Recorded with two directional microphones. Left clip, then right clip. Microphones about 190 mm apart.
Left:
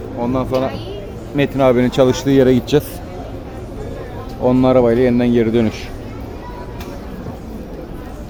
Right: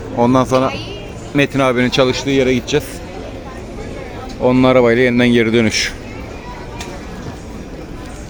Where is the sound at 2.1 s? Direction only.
30° left (ahead or behind).